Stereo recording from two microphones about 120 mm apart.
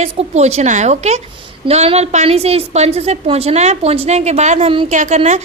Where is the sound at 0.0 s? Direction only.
60° right (ahead or behind).